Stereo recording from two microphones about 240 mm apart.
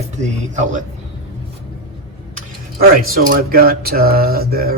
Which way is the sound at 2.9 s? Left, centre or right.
Right.